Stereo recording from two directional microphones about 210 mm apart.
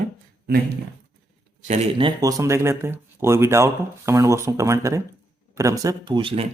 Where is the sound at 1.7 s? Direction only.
30° right (ahead or behind).